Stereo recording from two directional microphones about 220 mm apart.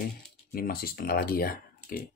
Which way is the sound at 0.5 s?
40° left (ahead or behind).